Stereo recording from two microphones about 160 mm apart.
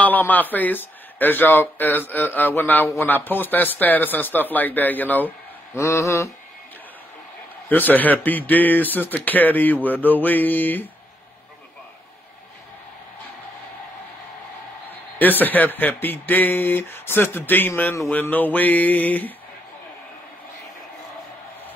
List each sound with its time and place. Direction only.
0.0 s a man's voice: 10° left (ahead or behind)
7.7 s a man's voice: 10° left (ahead or behind)
14.9 s a man's voice: 10° left (ahead or behind)